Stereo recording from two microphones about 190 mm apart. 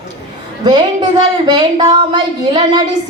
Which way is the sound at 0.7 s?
25° right (ahead or behind).